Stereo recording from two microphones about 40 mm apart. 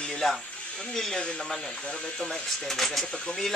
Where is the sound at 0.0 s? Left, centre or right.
Centre.